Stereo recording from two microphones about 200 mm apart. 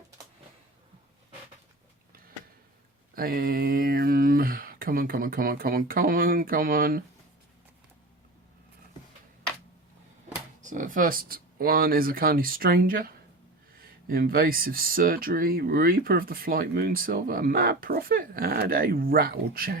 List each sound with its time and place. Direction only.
3.2 s speech: 50° right (ahead or behind)
10.6 s speech: 40° right (ahead or behind)
14.1 s speech: 45° right (ahead or behind)